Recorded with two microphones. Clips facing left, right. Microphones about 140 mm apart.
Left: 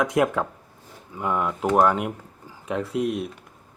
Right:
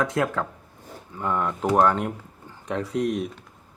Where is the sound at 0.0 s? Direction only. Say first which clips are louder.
Left 3 dB; 15° left (ahead or behind).